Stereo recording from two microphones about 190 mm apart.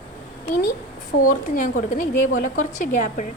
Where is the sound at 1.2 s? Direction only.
45° left (ahead or behind).